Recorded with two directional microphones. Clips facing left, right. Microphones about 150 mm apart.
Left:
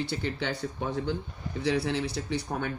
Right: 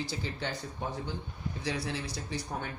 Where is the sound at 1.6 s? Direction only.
60° left (ahead or behind).